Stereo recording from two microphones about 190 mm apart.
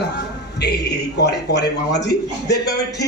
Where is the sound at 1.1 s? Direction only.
60° left (ahead or behind).